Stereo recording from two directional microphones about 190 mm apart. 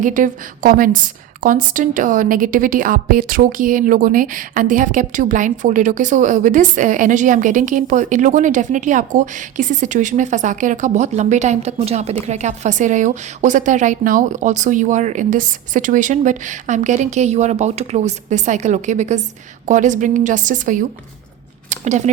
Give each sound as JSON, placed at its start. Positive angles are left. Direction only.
{"t": 0.0, "sound": "a woman's voice", "side_deg": -45}